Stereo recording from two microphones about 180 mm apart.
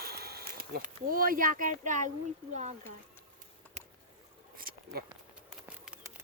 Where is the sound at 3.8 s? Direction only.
40° right (ahead or behind).